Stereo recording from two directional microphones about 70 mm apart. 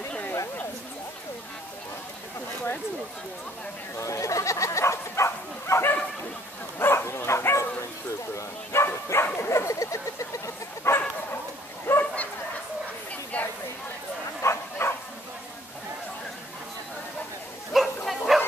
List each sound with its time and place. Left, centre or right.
4.0 s bow-wow: left
6.8 s dog: left
8.4 s bow-wow: left
9.5 s dog: left
11.8 s a sound: left
13.1 s a sound: left
14.4 s bow-wow: left
17.7 s bow-wow: centre